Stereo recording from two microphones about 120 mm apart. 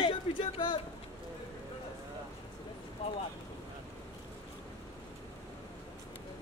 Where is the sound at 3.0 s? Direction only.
60° left (ahead or behind).